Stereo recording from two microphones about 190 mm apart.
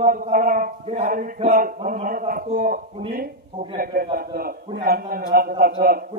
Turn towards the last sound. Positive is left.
turn(degrees=-50)  # may be behind; listen again after turning